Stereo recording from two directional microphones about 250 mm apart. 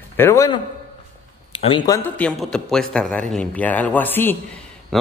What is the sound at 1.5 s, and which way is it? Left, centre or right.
Speech, left.